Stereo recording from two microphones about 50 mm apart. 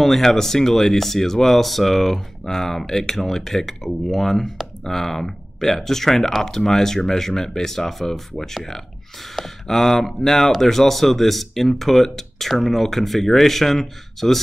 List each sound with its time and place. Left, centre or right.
0.0 s speech: centre